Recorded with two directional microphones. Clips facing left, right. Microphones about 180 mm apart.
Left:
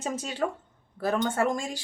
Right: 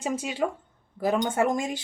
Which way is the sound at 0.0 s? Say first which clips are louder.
Right 2 dB; 10° right (ahead or behind).